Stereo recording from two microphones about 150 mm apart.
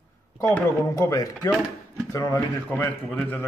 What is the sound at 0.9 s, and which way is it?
A man's voice, 20° left (ahead or behind).